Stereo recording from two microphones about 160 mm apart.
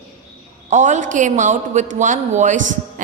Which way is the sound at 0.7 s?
50° right (ahead or behind).